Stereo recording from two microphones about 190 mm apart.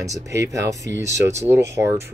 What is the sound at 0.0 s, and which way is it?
Speech, 15° right (ahead or behind).